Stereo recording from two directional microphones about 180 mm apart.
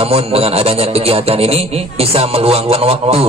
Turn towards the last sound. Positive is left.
turn(degrees=-35)  # may be behind; listen again after turning